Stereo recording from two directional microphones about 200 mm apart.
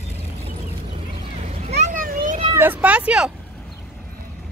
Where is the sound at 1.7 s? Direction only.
40° right (ahead or behind).